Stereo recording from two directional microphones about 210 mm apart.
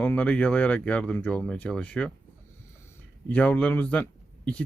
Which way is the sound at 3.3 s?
5° left (ahead or behind).